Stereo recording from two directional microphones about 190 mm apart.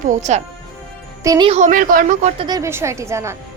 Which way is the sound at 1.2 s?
25° right (ahead or behind).